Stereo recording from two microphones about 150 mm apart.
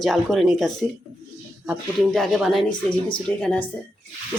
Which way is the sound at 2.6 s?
30° left (ahead or behind).